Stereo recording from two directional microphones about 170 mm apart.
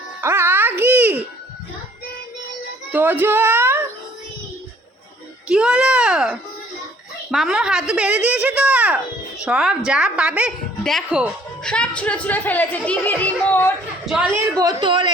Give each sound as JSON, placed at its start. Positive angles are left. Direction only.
{"t": 0.2, "sound": "music", "side_deg": -15}
{"t": 2.9, "sound": "a child's voice", "side_deg": -10}
{"t": 5.5, "sound": "a woman's voice", "side_deg": -5}
{"t": 14.0, "sound": "a man's voice", "side_deg": 0}
{"t": 14.6, "sound": "speech", "side_deg": -25}